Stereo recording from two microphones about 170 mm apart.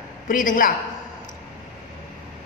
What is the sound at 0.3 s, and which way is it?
Speech, 50° left (ahead or behind).